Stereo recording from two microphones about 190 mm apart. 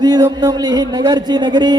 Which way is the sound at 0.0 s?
20° right (ahead or behind).